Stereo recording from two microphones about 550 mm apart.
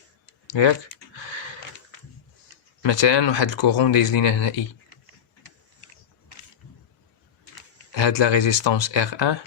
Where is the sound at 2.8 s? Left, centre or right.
Left.